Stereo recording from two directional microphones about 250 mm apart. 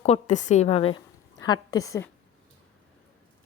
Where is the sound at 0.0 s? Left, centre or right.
Left.